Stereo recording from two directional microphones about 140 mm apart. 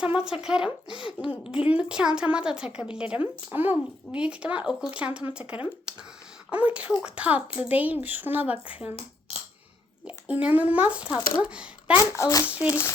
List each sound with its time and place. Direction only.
0.0 s speech: 5° right (ahead or behind)
10.2 s speech: 10° right (ahead or behind)
11.9 s a child's voice: 20° left (ahead or behind)
12.5 s speech: 10° right (ahead or behind)